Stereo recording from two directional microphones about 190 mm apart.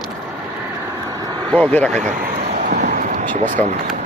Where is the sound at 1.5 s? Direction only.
5° left (ahead or behind).